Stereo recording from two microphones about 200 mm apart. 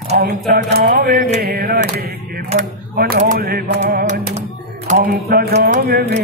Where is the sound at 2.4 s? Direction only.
45° right (ahead or behind).